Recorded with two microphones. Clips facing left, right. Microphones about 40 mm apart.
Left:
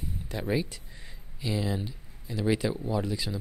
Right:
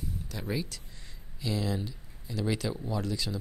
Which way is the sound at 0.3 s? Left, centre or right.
Left.